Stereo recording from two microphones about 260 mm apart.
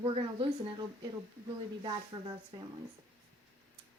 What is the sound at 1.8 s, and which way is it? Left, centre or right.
Speech, centre.